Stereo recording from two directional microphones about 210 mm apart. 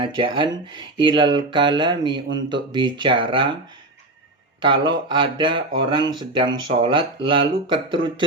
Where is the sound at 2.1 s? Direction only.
60° right (ahead or behind).